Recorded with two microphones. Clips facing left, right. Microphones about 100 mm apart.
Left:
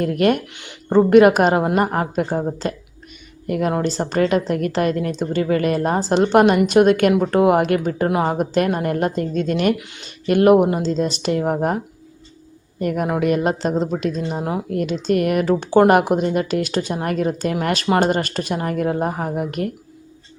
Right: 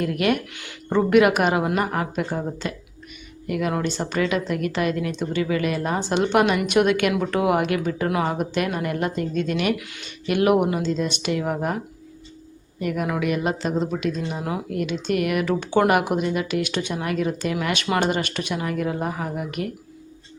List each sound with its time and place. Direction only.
0.0 s speech: 40° left (ahead or behind)
0.5 s speech: 25° left (ahead or behind); by 9.7 s 40° left (ahead or behind)
9.7 s speech: 25° left (ahead or behind)
10.2 s speech: 40° left (ahead or behind)
12.8 s speech: 40° left (ahead or behind)